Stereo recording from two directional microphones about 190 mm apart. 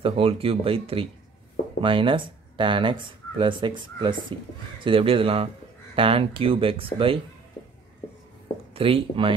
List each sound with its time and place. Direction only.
0.0 s speech: 30° right (ahead or behind)
8.7 s speech: 30° right (ahead or behind)